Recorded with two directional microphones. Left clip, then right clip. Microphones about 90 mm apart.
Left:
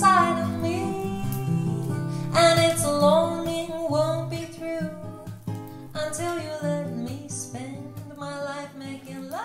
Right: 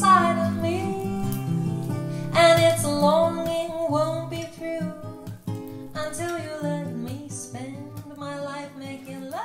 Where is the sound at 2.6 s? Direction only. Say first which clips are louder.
Right 1 dB; 40° left (ahead or behind).